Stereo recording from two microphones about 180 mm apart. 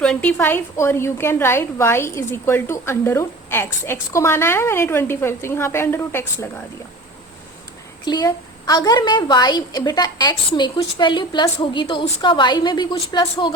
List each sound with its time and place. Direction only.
0.0 s a woman's voice: 5° left (ahead or behind)
8.0 s a woman's voice: 20° left (ahead or behind)